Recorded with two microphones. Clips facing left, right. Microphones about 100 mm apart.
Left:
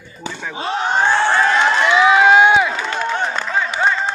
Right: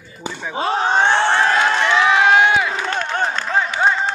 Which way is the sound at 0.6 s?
35° right (ahead or behind).